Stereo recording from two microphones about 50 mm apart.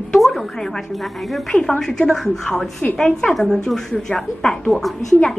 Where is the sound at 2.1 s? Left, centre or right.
Centre.